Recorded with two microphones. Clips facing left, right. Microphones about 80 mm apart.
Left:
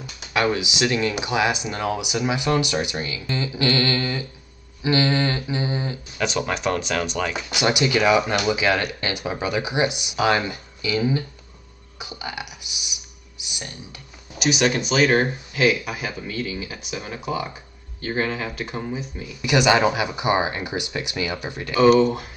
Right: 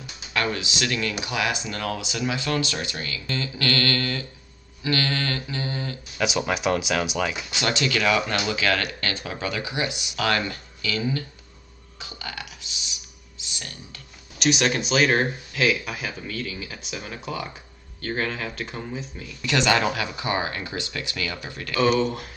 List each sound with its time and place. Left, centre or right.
0.3 s speech: centre
6.1 s speech: centre
7.5 s speech: centre
14.4 s speech: centre; by 21.8 s left
21.8 s speech: centre